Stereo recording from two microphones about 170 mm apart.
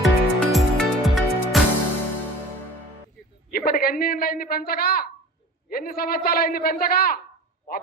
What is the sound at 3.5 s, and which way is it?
A man's voice, 60° left (ahead or behind).